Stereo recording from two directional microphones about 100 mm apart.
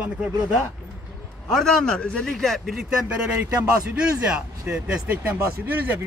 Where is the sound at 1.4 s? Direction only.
5° left (ahead or behind).